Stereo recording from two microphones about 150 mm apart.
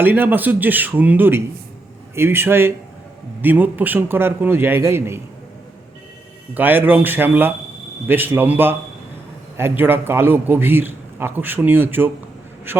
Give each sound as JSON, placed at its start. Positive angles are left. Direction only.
{"t": 0.0, "sound": "a man's voice", "side_deg": -15}
{"t": 6.5, "sound": "a man's voice", "side_deg": -10}